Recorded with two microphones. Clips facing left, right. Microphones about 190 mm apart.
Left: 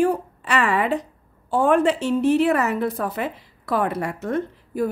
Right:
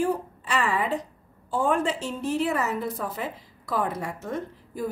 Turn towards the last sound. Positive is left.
turn(degrees=65)  # may be behind; listen again after turning